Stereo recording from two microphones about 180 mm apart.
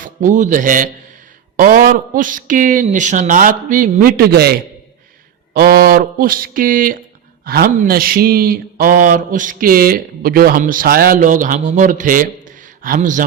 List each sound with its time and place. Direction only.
0.0 s a man's voice: 45° right (ahead or behind)
5.5 s speech: 60° right (ahead or behind)